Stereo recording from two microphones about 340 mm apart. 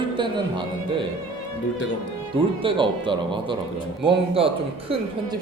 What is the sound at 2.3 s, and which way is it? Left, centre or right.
Speech, centre.